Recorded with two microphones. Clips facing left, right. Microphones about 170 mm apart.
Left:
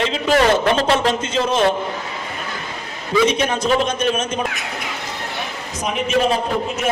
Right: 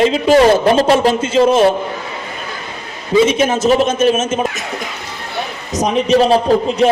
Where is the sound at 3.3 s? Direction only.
5° right (ahead or behind).